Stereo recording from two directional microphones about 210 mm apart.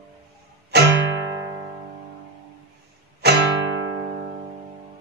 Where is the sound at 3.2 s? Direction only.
50° right (ahead or behind).